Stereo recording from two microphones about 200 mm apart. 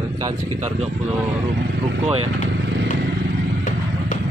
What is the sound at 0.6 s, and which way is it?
Speech, 35° right (ahead or behind).